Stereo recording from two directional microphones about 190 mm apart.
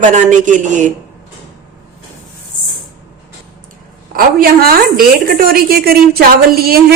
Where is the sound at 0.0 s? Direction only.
40° right (ahead or behind).